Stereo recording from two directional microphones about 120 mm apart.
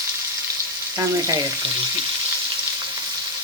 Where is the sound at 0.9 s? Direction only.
30° right (ahead or behind).